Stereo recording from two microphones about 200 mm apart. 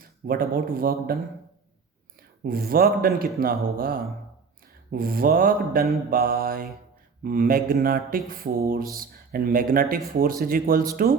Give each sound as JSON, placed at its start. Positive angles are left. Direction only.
{"t": 0.0, "sound": "speech", "side_deg": -45}
{"t": 2.4, "sound": "speech", "side_deg": -50}